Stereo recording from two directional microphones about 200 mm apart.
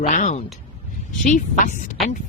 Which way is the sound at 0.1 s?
40° left (ahead or behind).